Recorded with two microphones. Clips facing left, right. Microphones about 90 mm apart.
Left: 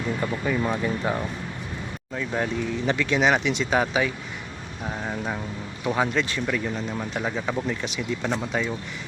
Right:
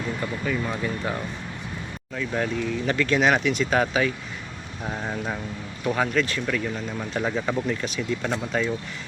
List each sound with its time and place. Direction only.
0.2 s speech: 15° left (ahead or behind)
4.8 s speech: centre (ahead or behind)
5.8 s speech: 15° left (ahead or behind)
7.1 s speech: 5° left (ahead or behind)